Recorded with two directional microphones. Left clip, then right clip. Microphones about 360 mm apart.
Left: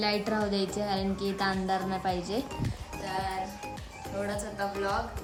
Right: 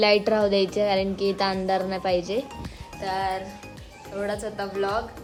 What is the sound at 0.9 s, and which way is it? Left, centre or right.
A woman's voice, centre.